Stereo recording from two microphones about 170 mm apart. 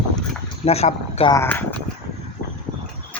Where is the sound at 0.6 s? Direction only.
40° left (ahead or behind).